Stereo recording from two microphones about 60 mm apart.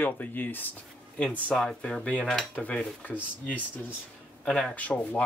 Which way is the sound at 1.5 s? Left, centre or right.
Centre.